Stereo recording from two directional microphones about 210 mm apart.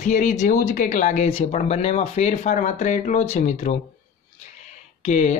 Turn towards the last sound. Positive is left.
turn(degrees=30)  # may be behind; listen again after turning